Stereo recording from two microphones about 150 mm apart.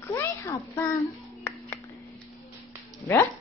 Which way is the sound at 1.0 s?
20° left (ahead or behind).